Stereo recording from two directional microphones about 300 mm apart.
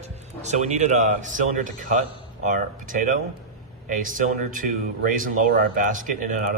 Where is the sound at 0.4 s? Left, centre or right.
Right.